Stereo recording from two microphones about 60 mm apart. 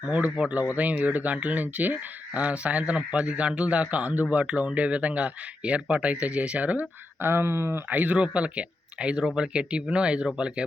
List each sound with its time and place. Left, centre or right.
0.3 s speech: centre
7.2 s speech: right
7.9 s speech: right